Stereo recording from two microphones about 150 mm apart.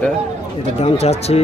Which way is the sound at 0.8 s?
45° left (ahead or behind).